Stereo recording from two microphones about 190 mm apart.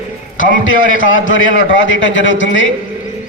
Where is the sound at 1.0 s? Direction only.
90° left.